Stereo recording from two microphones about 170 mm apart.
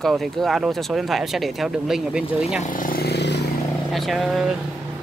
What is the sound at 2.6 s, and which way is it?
Vehicle, 50° left (ahead or behind).